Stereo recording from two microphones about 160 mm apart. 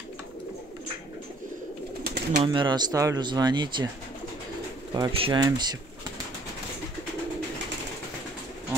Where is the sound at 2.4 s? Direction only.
30° right (ahead or behind).